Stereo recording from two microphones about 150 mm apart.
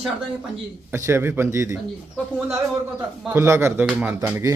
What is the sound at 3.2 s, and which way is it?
Speech, 15° right (ahead or behind).